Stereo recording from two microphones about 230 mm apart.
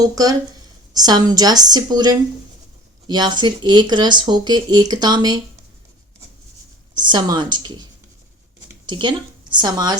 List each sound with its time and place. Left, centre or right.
0.0 s a woman's voice: centre
6.9 s speech: centre
8.9 s a woman's voice: centre